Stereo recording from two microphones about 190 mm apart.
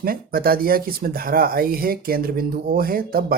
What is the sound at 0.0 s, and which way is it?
Speech, 50° right (ahead or behind).